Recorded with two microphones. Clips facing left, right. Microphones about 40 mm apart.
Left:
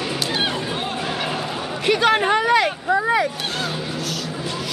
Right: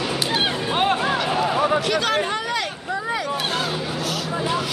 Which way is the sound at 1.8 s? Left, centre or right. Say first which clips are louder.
Left 4 dB; left.